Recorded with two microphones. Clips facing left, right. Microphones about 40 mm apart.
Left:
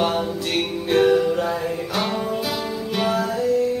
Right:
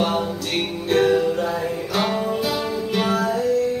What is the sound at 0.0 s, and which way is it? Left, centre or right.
Music, centre.